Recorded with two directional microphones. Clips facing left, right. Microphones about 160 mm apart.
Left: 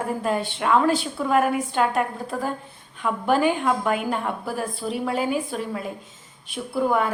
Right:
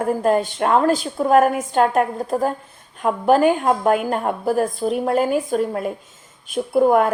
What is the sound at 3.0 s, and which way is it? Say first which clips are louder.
A woman's voice: right 5 dB; 45° right (ahead or behind).